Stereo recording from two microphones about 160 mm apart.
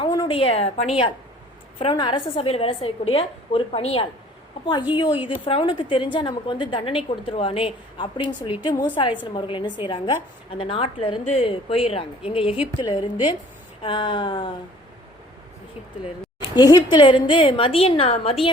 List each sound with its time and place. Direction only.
0.0 s a woman's voice: 30° left (ahead or behind)
1.8 s a woman's voice: 30° left (ahead or behind)
16.6 s a woman's voice: 25° left (ahead or behind)